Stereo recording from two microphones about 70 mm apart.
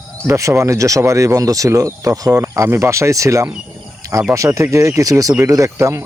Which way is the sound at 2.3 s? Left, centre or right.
Right.